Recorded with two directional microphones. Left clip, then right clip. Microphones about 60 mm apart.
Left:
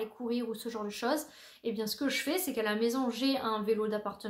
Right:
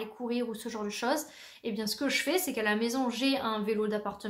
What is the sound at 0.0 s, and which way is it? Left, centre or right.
Speech, right.